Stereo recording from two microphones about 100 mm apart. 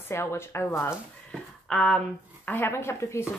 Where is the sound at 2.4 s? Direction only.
25° left (ahead or behind).